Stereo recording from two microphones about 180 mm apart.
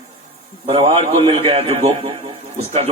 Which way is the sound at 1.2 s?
30° right (ahead or behind).